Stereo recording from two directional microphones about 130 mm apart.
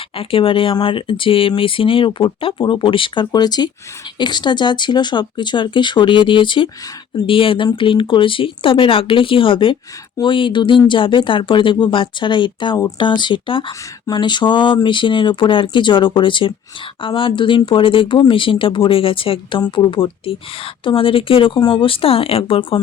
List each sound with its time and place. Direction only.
0.2 s speech: 45° left (ahead or behind)